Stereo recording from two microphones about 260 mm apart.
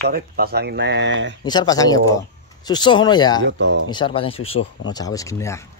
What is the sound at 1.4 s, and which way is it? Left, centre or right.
Speech, centre.